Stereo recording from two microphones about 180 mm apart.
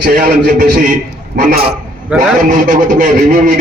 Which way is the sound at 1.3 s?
60° right (ahead or behind).